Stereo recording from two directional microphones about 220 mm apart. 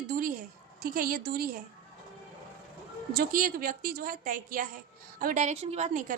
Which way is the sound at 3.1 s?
40° right (ahead or behind).